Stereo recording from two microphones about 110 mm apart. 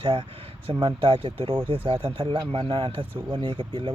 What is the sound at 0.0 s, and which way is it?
Speech, 50° right (ahead or behind).